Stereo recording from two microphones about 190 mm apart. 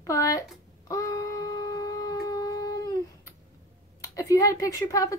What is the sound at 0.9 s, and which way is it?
Shofar, 15° left (ahead or behind).